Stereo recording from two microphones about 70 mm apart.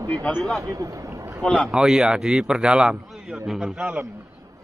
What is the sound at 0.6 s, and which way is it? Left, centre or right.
Speech, right.